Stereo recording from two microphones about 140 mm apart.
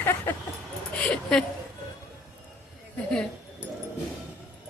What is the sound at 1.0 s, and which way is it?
Speech, 5° left (ahead or behind).